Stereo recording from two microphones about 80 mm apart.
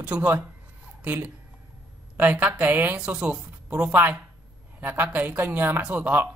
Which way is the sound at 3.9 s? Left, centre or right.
Right.